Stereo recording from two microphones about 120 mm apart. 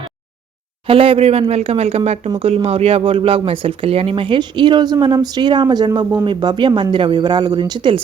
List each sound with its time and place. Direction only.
0.9 s speech: 50° right (ahead or behind)